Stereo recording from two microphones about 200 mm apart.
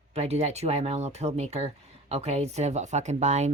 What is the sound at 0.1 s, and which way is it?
Speech, 30° right (ahead or behind).